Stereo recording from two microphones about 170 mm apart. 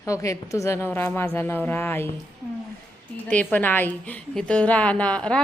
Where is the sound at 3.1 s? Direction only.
10° left (ahead or behind).